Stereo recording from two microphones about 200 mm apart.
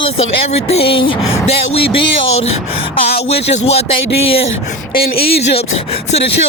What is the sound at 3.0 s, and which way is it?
Speech, 50° left (ahead or behind).